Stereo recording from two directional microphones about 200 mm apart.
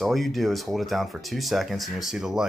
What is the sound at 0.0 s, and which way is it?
Speech, centre (ahead or behind).